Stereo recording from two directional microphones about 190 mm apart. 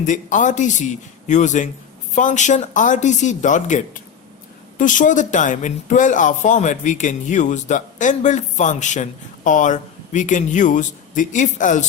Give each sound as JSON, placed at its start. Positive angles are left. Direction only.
{"t": 0.0, "sound": "speech", "side_deg": 40}